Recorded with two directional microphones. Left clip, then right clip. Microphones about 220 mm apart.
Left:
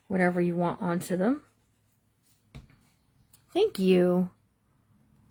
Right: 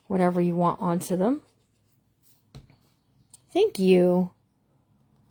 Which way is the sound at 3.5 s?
15° right (ahead or behind).